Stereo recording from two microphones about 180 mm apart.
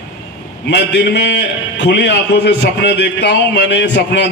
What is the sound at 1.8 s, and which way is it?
A man's voice, 75° left (ahead or behind).